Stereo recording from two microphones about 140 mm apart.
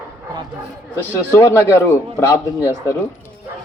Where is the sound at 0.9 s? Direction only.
15° left (ahead or behind).